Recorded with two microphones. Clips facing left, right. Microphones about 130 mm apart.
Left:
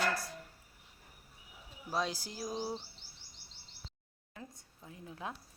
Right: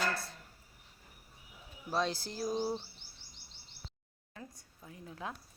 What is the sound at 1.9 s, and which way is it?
Music, 5° left (ahead or behind).